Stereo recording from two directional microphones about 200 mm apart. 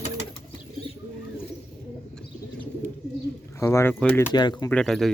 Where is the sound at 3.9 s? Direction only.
5° left (ahead or behind).